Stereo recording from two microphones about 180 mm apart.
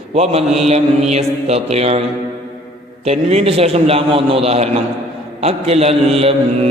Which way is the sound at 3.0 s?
35° right (ahead or behind).